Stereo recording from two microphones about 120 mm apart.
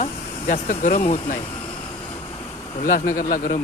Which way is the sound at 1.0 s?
70° left (ahead or behind).